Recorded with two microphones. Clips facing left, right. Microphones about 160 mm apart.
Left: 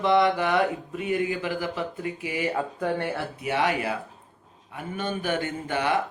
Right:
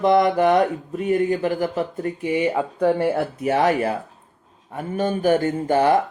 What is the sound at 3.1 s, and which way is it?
Speech, 40° right (ahead or behind).